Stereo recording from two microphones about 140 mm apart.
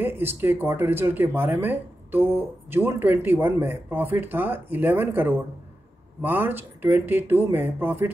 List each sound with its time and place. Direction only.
0.0 s speech: 15° right (ahead or behind)